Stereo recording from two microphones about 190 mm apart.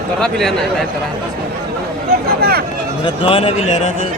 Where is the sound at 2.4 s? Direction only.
55° right (ahead or behind).